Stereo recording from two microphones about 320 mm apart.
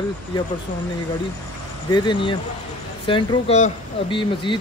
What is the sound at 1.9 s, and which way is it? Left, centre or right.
Speech, centre.